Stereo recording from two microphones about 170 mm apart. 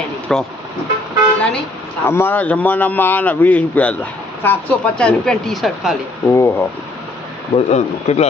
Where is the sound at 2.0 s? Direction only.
15° left (ahead or behind).